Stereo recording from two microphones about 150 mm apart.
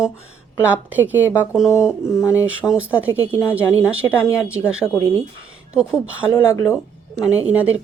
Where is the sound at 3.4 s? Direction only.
20° left (ahead or behind).